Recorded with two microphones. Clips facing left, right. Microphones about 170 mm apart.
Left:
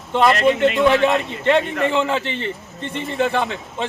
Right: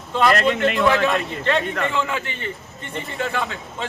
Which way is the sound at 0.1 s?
25° left (ahead or behind).